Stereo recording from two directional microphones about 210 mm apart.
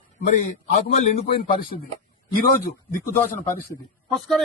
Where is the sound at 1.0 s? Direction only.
30° left (ahead or behind).